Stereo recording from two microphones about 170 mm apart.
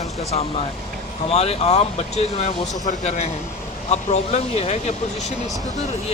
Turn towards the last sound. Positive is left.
turn(degrees=40)  # may be behind; listen again after turning